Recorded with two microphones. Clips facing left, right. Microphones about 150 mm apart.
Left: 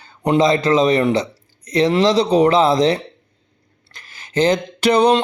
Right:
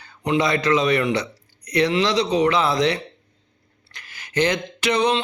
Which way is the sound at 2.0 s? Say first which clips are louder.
Left 5 dB; 30° left (ahead or behind).